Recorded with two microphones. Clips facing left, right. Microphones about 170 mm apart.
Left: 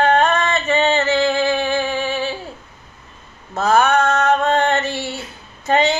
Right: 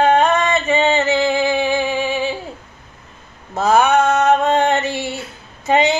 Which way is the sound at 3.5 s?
15° right (ahead or behind).